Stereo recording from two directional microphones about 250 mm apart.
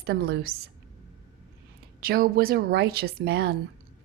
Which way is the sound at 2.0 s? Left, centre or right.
Right.